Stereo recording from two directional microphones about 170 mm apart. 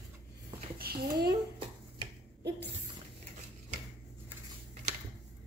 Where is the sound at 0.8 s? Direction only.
65° right (ahead or behind).